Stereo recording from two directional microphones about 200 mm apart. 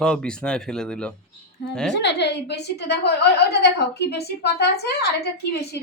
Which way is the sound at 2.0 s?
60° left (ahead or behind).